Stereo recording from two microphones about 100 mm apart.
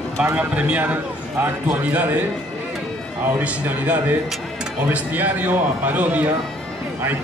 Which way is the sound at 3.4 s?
15° right (ahead or behind).